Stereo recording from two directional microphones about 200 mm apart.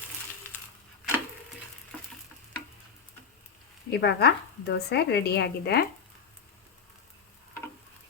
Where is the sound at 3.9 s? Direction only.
55° left (ahead or behind).